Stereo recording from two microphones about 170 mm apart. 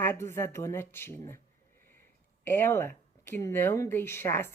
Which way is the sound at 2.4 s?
15° left (ahead or behind).